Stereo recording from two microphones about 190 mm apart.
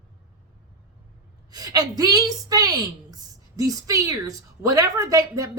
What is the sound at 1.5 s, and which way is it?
A woman's voice, 20° right (ahead or behind).